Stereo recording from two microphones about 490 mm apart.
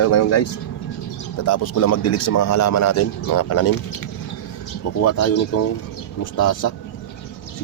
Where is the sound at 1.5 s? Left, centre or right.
Left.